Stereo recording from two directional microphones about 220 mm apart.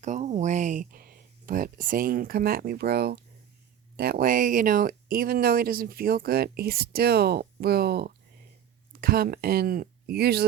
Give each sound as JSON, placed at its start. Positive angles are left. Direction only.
{"t": 0.0, "sound": "speech", "side_deg": -35}